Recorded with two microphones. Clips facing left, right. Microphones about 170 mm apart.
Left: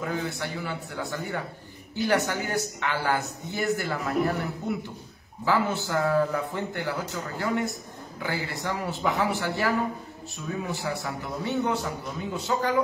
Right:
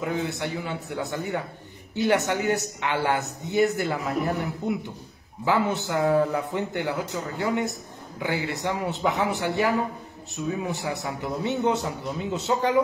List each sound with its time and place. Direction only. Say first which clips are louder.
0.0 s a man's voice: right 3 dB; 20° right (ahead or behind)